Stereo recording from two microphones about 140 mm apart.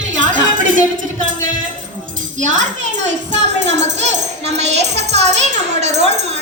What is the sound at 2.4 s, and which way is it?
A child's voice, 60° right (ahead or behind).